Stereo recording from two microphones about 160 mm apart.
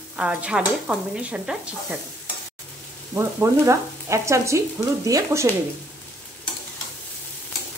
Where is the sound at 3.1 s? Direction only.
15° right (ahead or behind).